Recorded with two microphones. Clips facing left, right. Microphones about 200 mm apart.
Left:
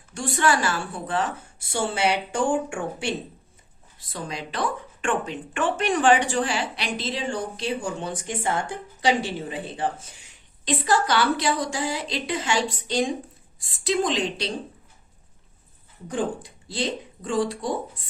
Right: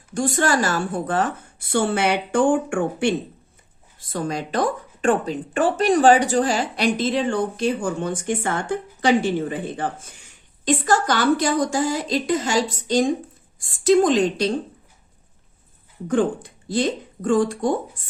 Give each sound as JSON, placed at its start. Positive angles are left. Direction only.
{"t": 0.1, "sound": "speech", "side_deg": -45}
{"t": 16.0, "sound": "speech", "side_deg": -55}